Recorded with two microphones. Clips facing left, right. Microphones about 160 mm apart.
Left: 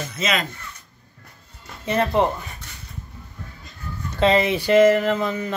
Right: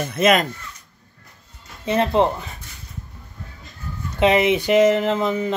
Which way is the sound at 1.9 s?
20° right (ahead or behind).